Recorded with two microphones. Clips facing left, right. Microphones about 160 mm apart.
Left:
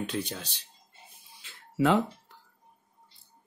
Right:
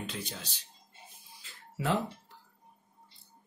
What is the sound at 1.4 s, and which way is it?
Music, 70° left (ahead or behind).